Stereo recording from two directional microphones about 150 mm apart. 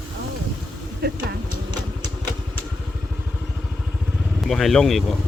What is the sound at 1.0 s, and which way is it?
Vehicle, 90° right.